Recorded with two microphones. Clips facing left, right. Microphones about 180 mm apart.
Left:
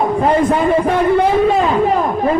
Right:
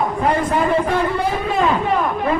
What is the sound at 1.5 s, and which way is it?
Speech, 35° left (ahead or behind).